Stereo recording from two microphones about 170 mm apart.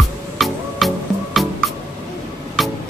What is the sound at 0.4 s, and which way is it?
Music, centre (ahead or behind).